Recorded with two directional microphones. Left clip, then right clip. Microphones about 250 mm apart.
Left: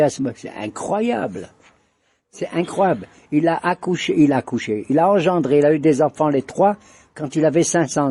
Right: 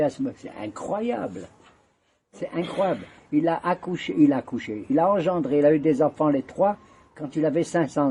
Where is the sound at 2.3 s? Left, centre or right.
Left.